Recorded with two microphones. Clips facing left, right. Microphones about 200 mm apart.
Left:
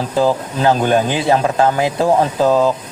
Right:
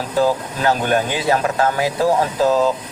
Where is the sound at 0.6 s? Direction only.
25° left (ahead or behind).